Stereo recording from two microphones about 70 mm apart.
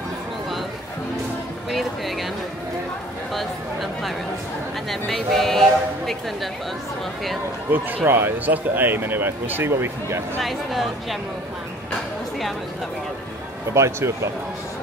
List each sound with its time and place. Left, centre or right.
1.7 s music: centre
3.3 s a sound: centre
7.7 s speech: right
10.4 s speech: centre
13.7 s speech: right